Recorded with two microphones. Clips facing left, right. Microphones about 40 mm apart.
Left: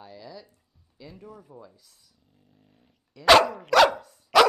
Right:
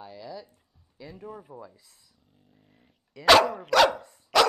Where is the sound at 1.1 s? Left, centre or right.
Right.